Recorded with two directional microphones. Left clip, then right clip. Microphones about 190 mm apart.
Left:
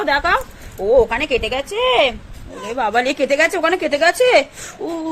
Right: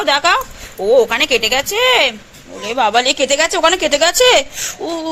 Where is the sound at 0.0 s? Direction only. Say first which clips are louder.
Right 3 dB; centre (ahead or behind).